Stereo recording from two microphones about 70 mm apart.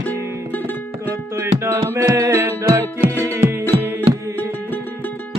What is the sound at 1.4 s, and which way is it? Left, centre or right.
Music, right.